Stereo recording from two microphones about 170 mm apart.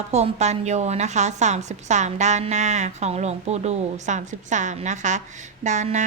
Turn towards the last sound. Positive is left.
turn(degrees=-45)  # may be behind; listen again after turning